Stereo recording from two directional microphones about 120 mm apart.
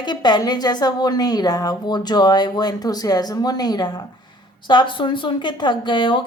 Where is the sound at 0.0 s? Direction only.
35° left (ahead or behind).